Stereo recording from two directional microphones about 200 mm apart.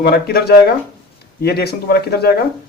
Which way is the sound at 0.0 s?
50° left (ahead or behind).